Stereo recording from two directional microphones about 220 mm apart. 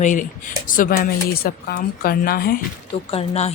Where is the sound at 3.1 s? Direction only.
30° left (ahead or behind).